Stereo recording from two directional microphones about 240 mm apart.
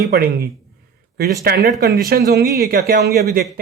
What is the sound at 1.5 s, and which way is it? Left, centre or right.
Speech, right.